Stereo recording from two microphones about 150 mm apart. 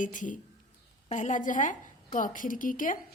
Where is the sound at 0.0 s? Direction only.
60° left (ahead or behind).